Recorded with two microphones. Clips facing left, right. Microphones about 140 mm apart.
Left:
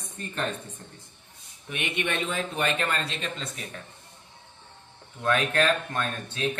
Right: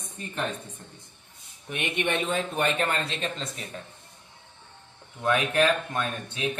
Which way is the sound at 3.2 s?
35° right (ahead or behind).